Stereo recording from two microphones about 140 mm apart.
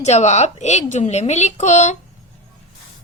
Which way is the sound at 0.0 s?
55° left (ahead or behind).